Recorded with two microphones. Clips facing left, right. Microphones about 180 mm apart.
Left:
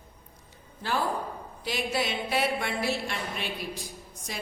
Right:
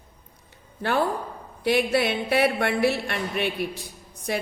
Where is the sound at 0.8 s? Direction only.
60° right (ahead or behind).